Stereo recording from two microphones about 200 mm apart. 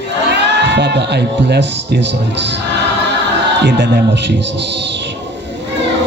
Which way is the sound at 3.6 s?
60° right (ahead or behind).